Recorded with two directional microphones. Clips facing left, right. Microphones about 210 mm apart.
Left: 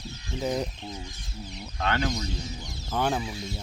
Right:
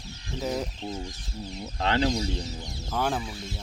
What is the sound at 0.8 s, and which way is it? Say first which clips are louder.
Speech: right 4 dB; 30° right (ahead or behind).